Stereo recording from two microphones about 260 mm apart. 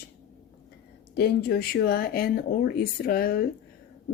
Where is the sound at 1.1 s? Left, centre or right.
Left.